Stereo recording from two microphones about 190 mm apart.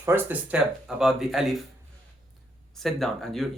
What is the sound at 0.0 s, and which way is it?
Speech, 10° right (ahead or behind).